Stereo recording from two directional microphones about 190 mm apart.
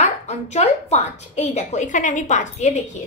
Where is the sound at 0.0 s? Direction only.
35° left (ahead or behind).